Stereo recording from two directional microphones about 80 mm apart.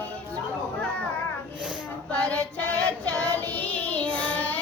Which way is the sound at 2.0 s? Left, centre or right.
Centre.